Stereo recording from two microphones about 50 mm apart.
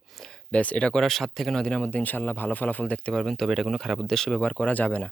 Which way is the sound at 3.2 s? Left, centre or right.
Centre.